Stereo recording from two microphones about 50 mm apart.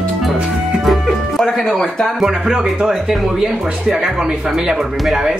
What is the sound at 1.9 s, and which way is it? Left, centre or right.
Speech, centre.